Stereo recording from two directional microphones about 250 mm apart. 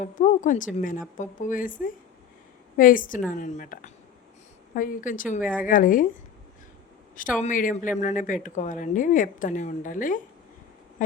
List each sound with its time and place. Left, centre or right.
0.0 s a woman's voice: left
7.4 s a woman's voice: left